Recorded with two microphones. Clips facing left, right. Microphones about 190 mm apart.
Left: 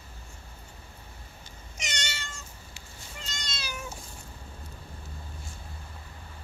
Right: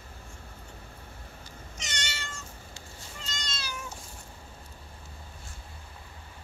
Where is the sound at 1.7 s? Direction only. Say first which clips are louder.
Left 2 dB; 15° left (ahead or behind).